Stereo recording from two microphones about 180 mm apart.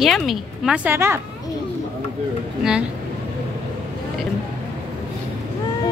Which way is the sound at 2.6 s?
5° right (ahead or behind).